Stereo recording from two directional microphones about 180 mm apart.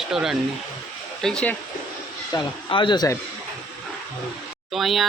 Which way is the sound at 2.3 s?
25° left (ahead or behind).